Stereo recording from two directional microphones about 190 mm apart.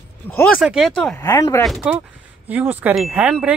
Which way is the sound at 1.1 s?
15° left (ahead or behind).